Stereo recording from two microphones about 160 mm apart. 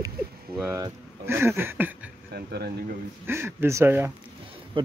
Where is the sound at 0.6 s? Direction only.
15° right (ahead or behind).